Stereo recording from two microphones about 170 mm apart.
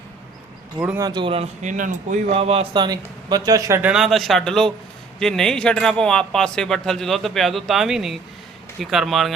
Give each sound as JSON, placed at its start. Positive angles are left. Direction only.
{"t": 0.9, "sound": "a man's voice", "side_deg": -20}
{"t": 1.6, "sound": "speech", "side_deg": -50}
{"t": 2.3, "sound": "a man's voice", "side_deg": -35}